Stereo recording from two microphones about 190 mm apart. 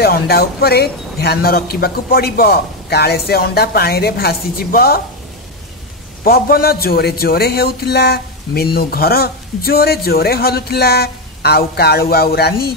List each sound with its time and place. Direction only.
0.0 s a man's voice: 55° left (ahead or behind)
6.2 s a man's voice: 50° left (ahead or behind)